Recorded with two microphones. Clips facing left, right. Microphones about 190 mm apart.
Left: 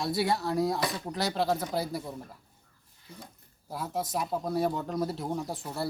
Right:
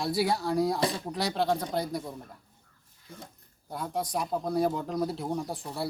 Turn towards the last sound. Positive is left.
turn(degrees=0)  # may be behind; listen again after turning